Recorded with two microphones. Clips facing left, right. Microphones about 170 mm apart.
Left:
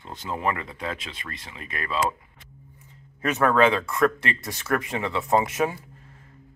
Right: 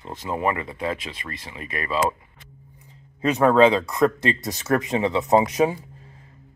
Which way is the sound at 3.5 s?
30° right (ahead or behind).